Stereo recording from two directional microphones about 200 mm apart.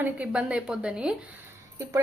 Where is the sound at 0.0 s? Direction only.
5° right (ahead or behind).